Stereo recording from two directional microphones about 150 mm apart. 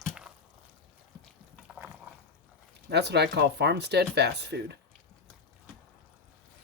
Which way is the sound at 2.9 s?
90° right.